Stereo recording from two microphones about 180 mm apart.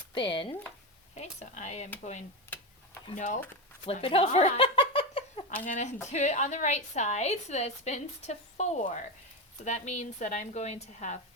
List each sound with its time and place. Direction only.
0.1 s speech: 30° left (ahead or behind)
1.1 s a woman's voice: 40° left (ahead or behind)
3.2 s speech: 45° left (ahead or behind)
3.8 s a sound: 30° left (ahead or behind)
5.6 s a woman's voice: 40° left (ahead or behind)